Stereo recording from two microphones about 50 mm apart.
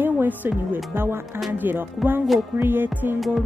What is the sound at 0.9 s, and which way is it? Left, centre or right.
Speech, right.